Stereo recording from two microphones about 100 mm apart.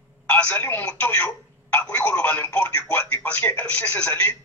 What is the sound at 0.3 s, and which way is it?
A man's voice, 15° left (ahead or behind).